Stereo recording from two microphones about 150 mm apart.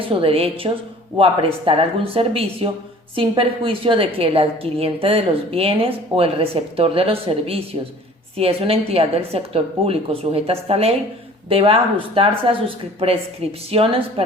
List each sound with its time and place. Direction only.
0.0 s a woman's voice: 35° right (ahead or behind)